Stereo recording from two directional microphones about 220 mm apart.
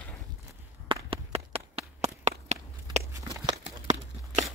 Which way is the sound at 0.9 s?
25° right (ahead or behind).